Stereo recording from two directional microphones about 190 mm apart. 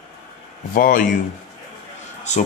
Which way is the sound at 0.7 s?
45° left (ahead or behind).